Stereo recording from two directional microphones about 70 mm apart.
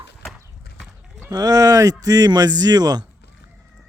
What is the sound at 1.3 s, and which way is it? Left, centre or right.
Speech, right.